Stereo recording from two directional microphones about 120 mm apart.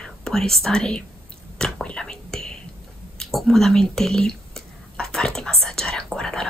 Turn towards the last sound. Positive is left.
turn(degrees=5)  # may be behind; listen again after turning